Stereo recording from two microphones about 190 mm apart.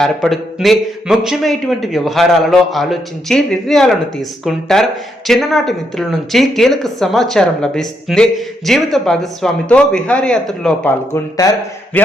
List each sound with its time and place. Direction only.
0.0 s speech: centre (ahead or behind)
11.1 s speech: 20° left (ahead or behind)